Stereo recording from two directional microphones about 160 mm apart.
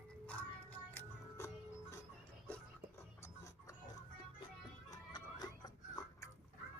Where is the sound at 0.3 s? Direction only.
10° left (ahead or behind).